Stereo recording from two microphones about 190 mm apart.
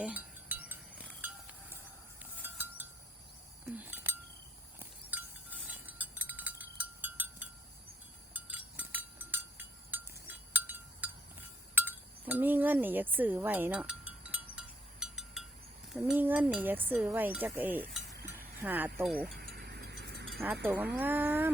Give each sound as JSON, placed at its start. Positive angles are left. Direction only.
{"t": 0.0, "sound": "a sound", "side_deg": -5}
{"t": 2.4, "sound": "music", "side_deg": -10}
{"t": 3.7, "sound": "chink", "side_deg": -10}
{"t": 4.8, "sound": "wind chime", "side_deg": -10}
{"t": 8.3, "sound": "cowbell", "side_deg": -10}
{"t": 15.9, "sound": "speech", "side_deg": 0}
{"t": 19.0, "sound": "speech", "side_deg": 0}
{"t": 19.4, "sound": "a sound", "side_deg": -55}
{"t": 20.9, "sound": "speech", "side_deg": -10}